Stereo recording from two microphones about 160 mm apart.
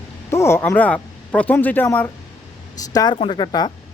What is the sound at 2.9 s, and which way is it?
Speech, 25° left (ahead or behind).